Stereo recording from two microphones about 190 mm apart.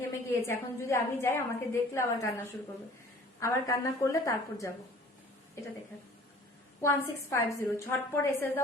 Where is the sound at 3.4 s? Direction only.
15° left (ahead or behind).